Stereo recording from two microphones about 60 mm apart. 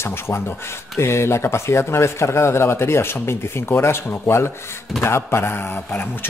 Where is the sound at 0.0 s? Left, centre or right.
Left.